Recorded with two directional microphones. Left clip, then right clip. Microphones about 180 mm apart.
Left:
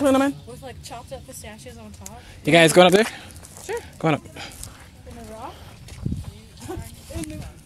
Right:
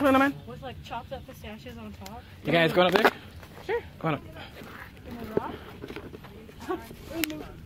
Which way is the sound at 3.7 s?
10° right (ahead or behind).